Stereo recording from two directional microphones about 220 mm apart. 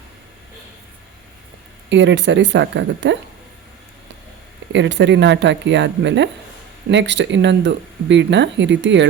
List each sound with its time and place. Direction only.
1.9 s speech: 55° right (ahead or behind)
4.7 s speech: 55° right (ahead or behind)